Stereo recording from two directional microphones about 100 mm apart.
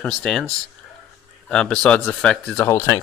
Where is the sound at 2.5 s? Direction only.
20° left (ahead or behind).